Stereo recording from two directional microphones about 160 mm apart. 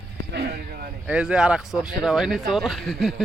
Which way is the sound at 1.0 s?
5° right (ahead or behind).